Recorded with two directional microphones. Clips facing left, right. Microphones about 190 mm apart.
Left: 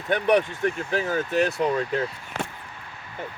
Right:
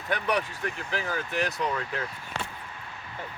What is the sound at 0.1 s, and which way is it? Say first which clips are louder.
Speech: left 7 dB; 25° left (ahead or behind).